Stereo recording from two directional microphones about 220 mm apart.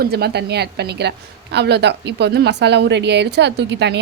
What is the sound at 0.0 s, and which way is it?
A woman's voice, 45° right (ahead or behind).